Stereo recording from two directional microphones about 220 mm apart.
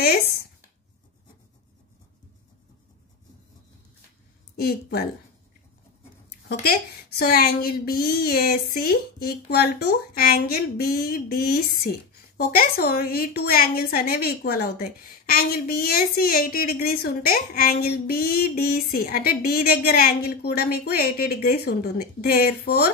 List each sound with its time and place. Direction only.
4.6 s a woman's voice: 45° left (ahead or behind)
6.6 s a woman's voice: 45° left (ahead or behind)